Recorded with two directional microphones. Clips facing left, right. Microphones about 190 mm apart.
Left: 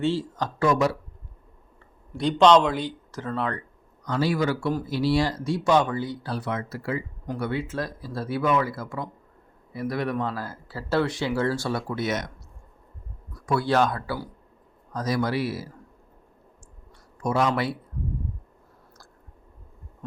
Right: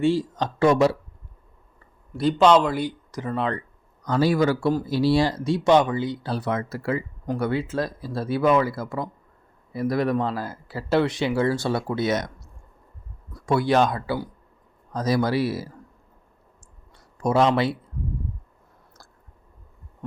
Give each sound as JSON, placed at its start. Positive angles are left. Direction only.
{"t": 0.0, "sound": "speech", "side_deg": -15}
{"t": 2.1, "sound": "speech", "side_deg": -5}
{"t": 4.0, "sound": "a man's voice", "side_deg": -45}
{"t": 4.7, "sound": "speech", "side_deg": -30}
{"t": 6.4, "sound": "speech", "side_deg": -45}
{"t": 7.7, "sound": "a man's voice", "side_deg": -25}
{"t": 10.3, "sound": "speech", "side_deg": -20}
{"t": 13.3, "sound": "speech", "side_deg": -25}
{"t": 14.9, "sound": "a man's voice", "side_deg": -30}
{"t": 17.2, "sound": "speech", "side_deg": -30}